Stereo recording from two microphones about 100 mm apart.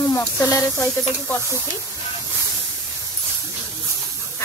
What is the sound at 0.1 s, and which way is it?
Speech, 25° left (ahead or behind).